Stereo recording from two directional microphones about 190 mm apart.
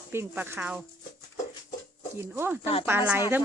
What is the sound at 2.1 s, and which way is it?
Speech, 10° right (ahead or behind).